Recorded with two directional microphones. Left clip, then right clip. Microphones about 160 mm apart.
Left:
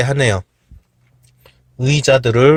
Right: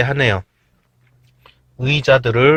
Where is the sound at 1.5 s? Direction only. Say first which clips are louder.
Even; 60° left (ahead or behind).